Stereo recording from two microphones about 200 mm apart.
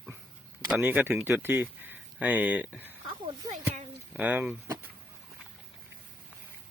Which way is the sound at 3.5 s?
35° right (ahead or behind).